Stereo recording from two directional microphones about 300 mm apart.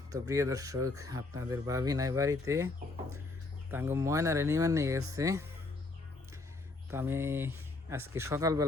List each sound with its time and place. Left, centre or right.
0.1 s speech: centre
2.8 s speech: right
3.7 s speech: centre
6.9 s speech: centre